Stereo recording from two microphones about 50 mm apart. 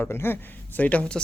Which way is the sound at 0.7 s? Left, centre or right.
Left.